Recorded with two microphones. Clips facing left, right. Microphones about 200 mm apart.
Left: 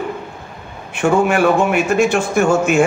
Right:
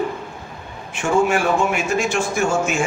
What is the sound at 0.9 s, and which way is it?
A man's voice, 60° left (ahead or behind).